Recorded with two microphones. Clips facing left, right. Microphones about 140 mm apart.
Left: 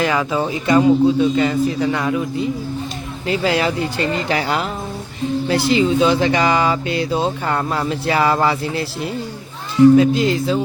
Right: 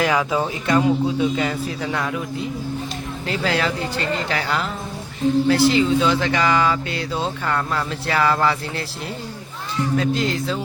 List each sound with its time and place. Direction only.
0.0 s speech: centre (ahead or behind); by 7.3 s 15° left (ahead or behind)
7.4 s speech: 25° left (ahead or behind)
10.0 s speech: 10° left (ahead or behind)